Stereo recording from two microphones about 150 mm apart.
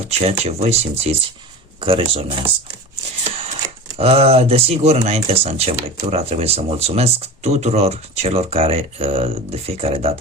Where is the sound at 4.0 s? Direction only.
40° right (ahead or behind).